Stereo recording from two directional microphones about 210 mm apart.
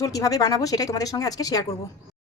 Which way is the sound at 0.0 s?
15° left (ahead or behind).